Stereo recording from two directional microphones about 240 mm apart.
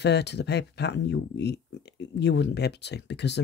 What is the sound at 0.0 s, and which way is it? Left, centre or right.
Speech, left.